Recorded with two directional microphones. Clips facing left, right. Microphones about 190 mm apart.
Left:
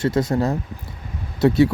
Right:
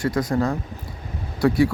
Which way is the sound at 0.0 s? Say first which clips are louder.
Left 2 dB; 25° left (ahead or behind).